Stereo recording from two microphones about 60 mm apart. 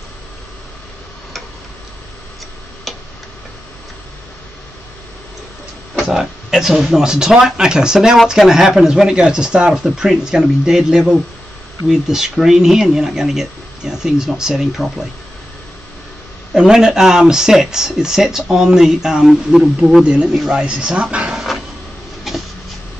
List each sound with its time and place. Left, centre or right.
6.0 s speech: centre
16.5 s speech: centre
22.3 s a sound: centre